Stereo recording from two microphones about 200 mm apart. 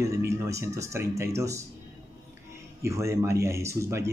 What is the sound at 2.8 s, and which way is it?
Speech, 15° right (ahead or behind).